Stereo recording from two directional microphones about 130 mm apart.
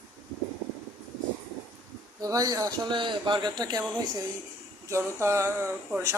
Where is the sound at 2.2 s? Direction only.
30° right (ahead or behind).